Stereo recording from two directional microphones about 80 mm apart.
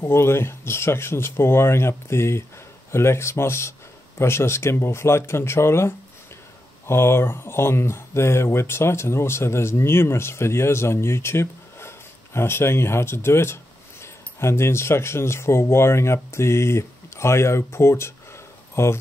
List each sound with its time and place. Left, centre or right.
0.0 s speech: left